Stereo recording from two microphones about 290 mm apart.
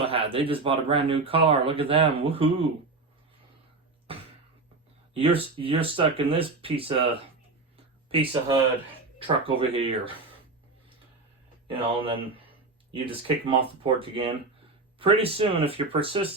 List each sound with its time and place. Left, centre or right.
0.0 s speech: centre
5.1 s speech: centre
8.1 s speech: centre
11.7 s speech: centre